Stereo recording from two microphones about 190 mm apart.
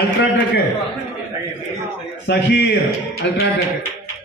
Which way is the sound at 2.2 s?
65° left (ahead or behind).